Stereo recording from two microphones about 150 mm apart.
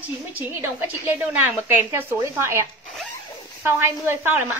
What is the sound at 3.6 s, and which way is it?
Speech, 15° right (ahead or behind).